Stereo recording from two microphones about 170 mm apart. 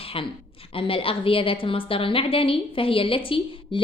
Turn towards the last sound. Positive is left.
turn(degrees=30)  # may be behind; listen again after turning